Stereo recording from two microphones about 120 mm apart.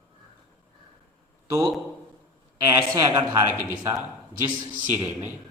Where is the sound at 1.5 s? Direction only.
30° right (ahead or behind).